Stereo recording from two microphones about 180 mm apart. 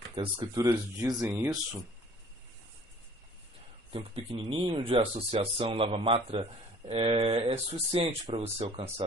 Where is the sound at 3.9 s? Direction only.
30° right (ahead or behind).